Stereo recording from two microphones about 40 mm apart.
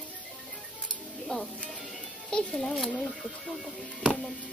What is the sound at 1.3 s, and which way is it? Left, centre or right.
Speech, left.